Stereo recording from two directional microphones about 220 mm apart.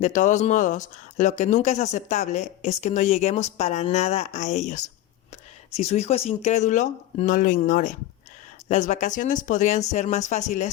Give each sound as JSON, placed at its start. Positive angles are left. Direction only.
{"t": 0.0, "sound": "speech", "side_deg": 35}